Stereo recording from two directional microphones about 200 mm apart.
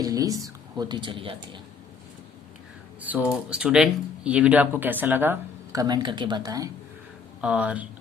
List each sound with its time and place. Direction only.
0.0 s speech: 20° right (ahead or behind)
3.0 s speech: 10° right (ahead or behind)
7.4 s speech: 5° right (ahead or behind)